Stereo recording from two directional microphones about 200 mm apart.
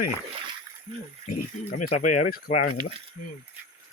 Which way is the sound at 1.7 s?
40° left (ahead or behind).